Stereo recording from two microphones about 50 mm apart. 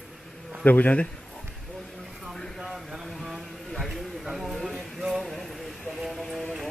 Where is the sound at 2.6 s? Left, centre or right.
Centre.